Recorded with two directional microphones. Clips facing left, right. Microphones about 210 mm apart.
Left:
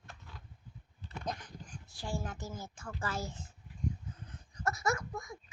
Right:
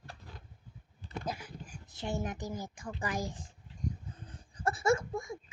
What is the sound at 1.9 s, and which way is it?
Speech, 20° right (ahead or behind).